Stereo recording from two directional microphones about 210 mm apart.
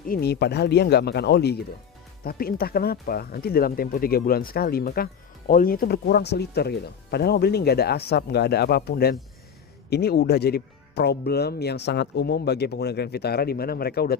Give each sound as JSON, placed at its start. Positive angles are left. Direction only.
{"t": 0.0, "sound": "speech", "side_deg": 45}